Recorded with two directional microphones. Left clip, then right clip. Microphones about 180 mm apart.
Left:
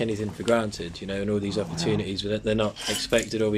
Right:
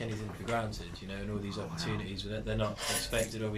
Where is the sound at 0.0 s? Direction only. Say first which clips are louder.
Left 13 dB; 60° left (ahead or behind).